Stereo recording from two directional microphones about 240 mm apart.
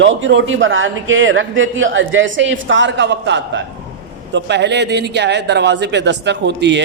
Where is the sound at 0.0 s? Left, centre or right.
Right.